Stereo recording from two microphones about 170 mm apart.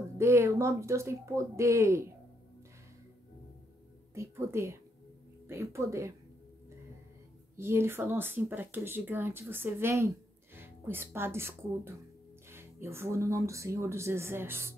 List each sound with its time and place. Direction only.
0.2 s speech: 15° right (ahead or behind)
4.1 s speech: 15° right (ahead or behind)
7.5 s speech: 15° right (ahead or behind)